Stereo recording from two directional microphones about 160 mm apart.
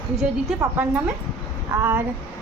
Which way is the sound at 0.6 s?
10° right (ahead or behind).